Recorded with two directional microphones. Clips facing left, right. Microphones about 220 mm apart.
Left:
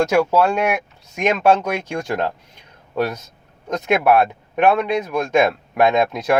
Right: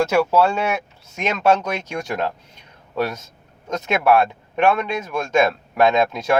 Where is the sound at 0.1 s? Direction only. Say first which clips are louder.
Left 1 dB; 15° left (ahead or behind).